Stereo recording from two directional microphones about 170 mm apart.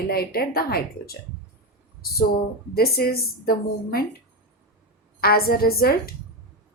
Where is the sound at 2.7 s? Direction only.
65° left (ahead or behind).